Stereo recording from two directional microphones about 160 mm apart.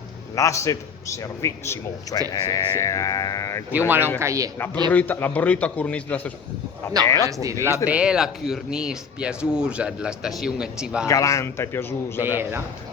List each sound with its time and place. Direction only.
0.3 s a man's voice: 20° left (ahead or behind)
3.7 s speech: 10° right (ahead or behind)
4.5 s a man's voice: 15° left (ahead or behind)
7.9 s speech: 5° right (ahead or behind)
11.1 s a man's voice: 20° left (ahead or behind)
12.4 s speech: 15° right (ahead or behind)